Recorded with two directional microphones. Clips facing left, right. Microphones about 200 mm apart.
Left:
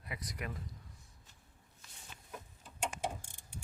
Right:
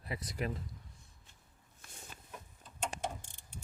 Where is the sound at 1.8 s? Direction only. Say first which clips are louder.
Right 6 dB; 50° right (ahead or behind).